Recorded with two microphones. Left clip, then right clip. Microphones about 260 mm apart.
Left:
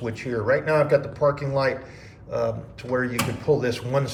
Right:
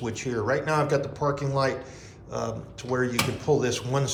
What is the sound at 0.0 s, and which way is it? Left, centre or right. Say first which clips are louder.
Speech: left 2 dB; centre.